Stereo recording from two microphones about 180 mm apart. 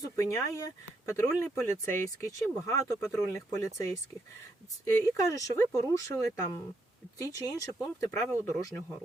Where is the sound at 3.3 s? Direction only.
15° left (ahead or behind).